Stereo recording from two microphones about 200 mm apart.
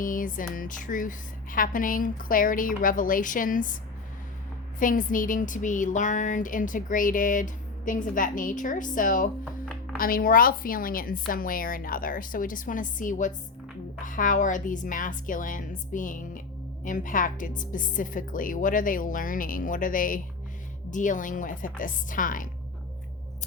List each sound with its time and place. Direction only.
0.0 s speech: 45° left (ahead or behind)
4.8 s speech: 40° left (ahead or behind)